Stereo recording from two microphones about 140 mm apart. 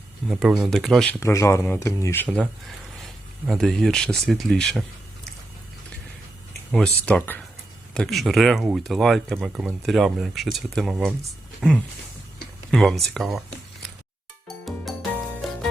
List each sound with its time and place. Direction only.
0.3 s speech: centre (ahead or behind)
1.2 s speech: 20° left (ahead or behind)
2.3 s speech: 5° left (ahead or behind)
6.7 s speech: 5° left (ahead or behind)
7.9 s speech: centre (ahead or behind)
15.4 s music: centre (ahead or behind)